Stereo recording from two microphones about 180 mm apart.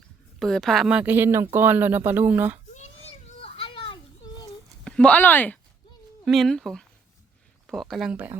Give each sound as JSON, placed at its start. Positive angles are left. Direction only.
{"t": 0.3, "sound": "speech", "side_deg": 0}
{"t": 2.7, "sound": "children playing", "side_deg": 40}
{"t": 4.8, "sound": "speech", "side_deg": 5}